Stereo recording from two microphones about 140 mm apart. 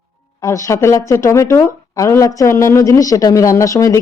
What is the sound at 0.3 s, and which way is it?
A woman's voice, 25° left (ahead or behind).